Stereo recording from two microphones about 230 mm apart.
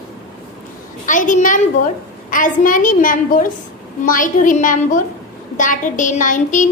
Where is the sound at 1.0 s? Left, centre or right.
Left.